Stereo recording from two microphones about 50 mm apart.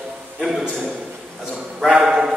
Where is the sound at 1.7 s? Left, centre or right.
Centre.